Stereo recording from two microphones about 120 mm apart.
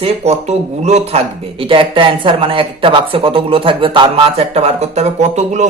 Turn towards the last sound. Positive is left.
turn(degrees=-70)  # may be behind; listen again after turning